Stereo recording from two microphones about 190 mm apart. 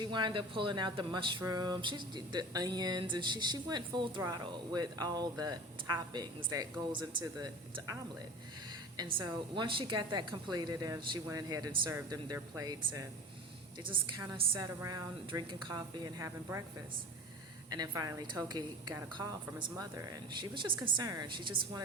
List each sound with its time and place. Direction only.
0.0 s speech: 25° right (ahead or behind)
9.0 s speech: 25° right (ahead or behind)
17.7 s speech: 20° right (ahead or behind)